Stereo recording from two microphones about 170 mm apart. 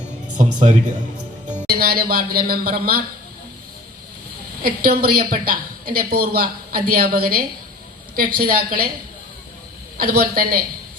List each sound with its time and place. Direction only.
0.3 s music: 45° right (ahead or behind)
1.7 s a woman's voice: 60° right (ahead or behind)
4.6 s a woman's voice: 60° right (ahead or behind)
10.0 s a woman's voice: 60° right (ahead or behind)